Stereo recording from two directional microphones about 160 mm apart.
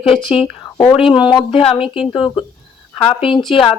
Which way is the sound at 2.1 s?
35° left (ahead or behind).